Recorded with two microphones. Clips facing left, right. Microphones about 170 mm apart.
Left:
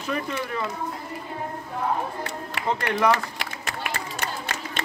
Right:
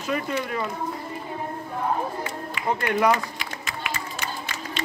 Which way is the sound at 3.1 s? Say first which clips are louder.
Even; 65° left (ahead or behind).